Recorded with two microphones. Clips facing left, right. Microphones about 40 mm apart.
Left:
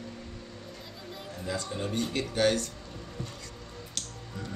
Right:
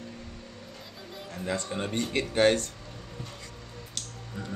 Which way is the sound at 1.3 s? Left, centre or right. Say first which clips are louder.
Right 3 dB; right.